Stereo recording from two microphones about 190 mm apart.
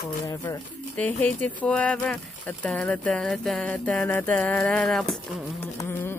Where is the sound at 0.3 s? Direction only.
15° left (ahead or behind); by 5.6 s centre (ahead or behind).